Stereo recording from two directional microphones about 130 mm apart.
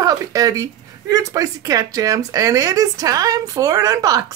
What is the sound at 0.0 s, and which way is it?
Speech, 25° right (ahead or behind).